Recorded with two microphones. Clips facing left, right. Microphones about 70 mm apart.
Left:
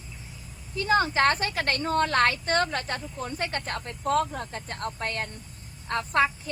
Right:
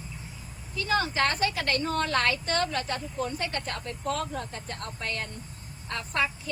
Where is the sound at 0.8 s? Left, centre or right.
Left.